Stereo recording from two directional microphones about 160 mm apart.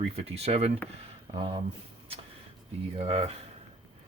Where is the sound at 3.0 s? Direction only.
40° right (ahead or behind).